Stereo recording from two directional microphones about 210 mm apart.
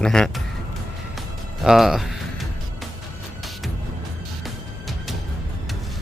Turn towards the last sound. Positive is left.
turn(degrees=0)  # may be behind; listen again after turning